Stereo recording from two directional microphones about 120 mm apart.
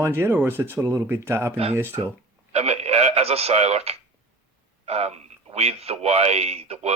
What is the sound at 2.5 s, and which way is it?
A man's voice, 60° right (ahead or behind).